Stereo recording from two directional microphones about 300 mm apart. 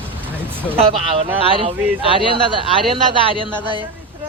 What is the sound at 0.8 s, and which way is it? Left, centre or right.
Speech, centre.